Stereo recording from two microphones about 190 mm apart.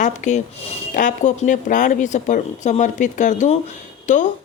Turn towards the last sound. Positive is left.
turn(degrees=40)  # may be behind; listen again after turning